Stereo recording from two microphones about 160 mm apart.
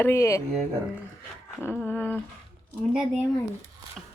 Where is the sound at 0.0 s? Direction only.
15° left (ahead or behind).